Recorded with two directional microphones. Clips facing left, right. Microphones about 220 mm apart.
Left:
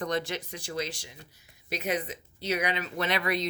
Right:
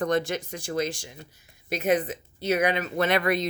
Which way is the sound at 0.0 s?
50° right (ahead or behind).